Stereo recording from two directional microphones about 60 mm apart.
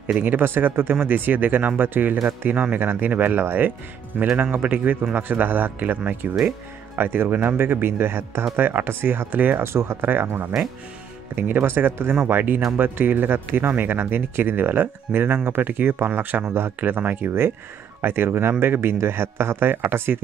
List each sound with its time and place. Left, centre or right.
0.0 s speech: right